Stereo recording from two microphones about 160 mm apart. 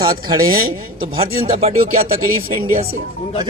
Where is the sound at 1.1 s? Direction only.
35° right (ahead or behind).